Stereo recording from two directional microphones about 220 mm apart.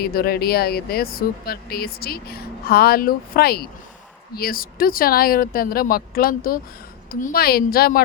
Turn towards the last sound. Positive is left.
turn(degrees=40)  # may be behind; listen again after turning